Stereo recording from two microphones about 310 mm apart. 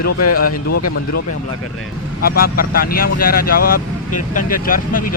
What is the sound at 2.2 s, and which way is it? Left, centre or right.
Speech, left.